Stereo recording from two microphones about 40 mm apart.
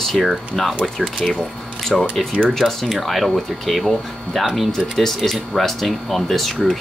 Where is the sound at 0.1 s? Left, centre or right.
Centre.